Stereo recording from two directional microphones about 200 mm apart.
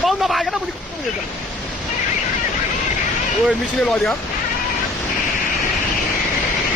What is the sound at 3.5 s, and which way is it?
Speech, centre (ahead or behind).